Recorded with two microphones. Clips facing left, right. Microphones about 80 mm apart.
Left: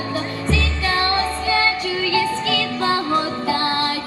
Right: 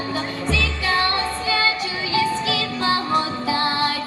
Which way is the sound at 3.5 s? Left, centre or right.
Centre.